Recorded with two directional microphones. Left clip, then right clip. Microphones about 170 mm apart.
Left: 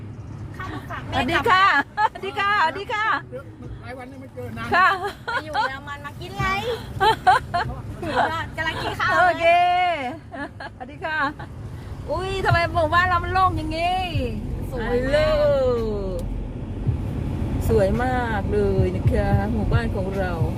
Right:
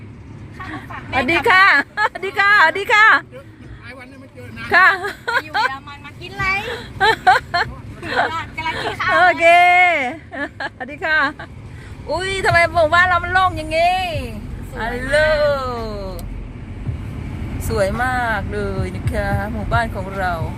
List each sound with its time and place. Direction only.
0.7 s speech: 10° right (ahead or behind)
2.7 s a woman's voice: 40° right (ahead or behind)
4.7 s speech: 10° right (ahead or behind)
11.1 s speech: 10° right (ahead or behind)
17.6 s speech: 10° right (ahead or behind)